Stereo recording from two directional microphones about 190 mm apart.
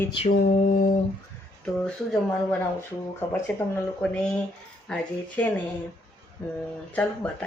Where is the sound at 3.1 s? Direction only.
10° left (ahead or behind).